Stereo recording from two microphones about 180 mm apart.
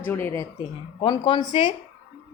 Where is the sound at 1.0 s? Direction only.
30° left (ahead or behind).